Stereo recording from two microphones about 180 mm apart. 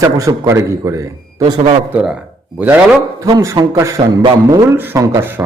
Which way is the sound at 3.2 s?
20° right (ahead or behind).